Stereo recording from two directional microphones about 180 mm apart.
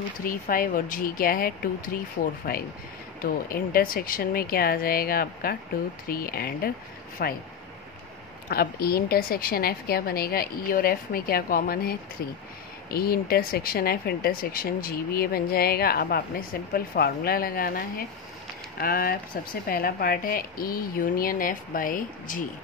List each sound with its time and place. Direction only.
0.2 s speech: 50° left (ahead or behind)
8.5 s speech: 55° left (ahead or behind)